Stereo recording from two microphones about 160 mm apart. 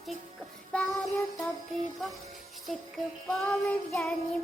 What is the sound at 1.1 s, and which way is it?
Music, centre (ahead or behind).